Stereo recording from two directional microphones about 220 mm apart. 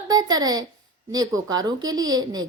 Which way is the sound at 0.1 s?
15° right (ahead or behind).